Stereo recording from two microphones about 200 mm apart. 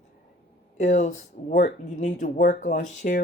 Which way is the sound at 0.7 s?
35° left (ahead or behind).